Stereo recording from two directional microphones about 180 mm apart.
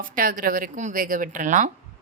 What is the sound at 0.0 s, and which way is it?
Speech, 50° right (ahead or behind).